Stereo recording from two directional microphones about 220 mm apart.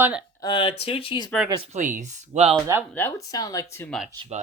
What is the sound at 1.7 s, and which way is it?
Speech, 35° right (ahead or behind).